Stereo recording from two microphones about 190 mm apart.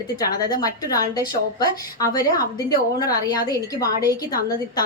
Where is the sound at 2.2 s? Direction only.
50° left (ahead or behind).